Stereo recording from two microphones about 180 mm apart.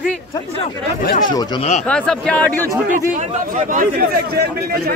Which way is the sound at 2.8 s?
45° right (ahead or behind).